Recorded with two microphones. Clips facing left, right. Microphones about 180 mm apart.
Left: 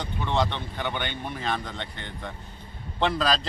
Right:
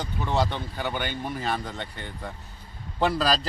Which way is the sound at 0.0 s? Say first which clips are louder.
Even; 10° right (ahead or behind).